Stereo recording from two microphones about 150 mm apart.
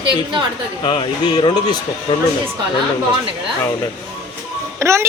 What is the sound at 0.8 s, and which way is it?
Speech, 35° left (ahead or behind).